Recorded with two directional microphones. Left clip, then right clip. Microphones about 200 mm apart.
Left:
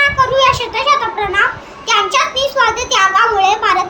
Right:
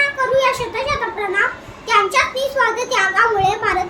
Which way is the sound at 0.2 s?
15° right (ahead or behind).